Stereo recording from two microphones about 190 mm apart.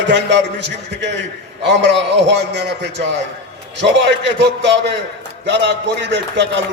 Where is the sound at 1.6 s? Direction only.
65° right (ahead or behind).